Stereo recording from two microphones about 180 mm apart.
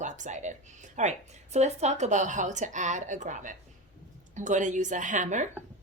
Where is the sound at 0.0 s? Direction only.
40° right (ahead or behind).